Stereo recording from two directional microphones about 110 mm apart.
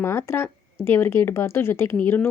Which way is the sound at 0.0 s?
25° left (ahead or behind).